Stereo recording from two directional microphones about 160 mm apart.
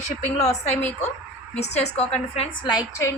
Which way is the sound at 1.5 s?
45° left (ahead or behind).